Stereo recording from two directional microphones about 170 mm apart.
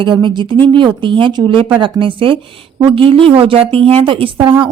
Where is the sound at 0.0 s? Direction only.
30° right (ahead or behind).